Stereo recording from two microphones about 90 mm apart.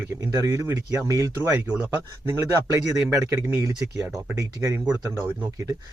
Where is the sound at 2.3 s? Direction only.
35° right (ahead or behind).